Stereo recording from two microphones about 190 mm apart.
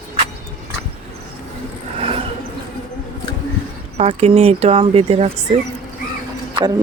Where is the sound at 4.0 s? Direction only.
35° right (ahead or behind).